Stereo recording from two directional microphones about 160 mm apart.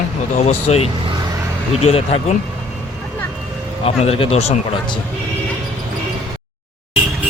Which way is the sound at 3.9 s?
40° left (ahead or behind).